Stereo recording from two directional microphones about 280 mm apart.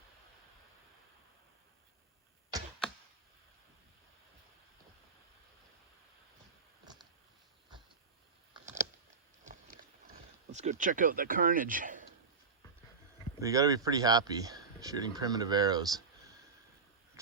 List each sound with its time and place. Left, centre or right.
9.4 s a sound: right
10.5 s speech: right
13.4 s speech: centre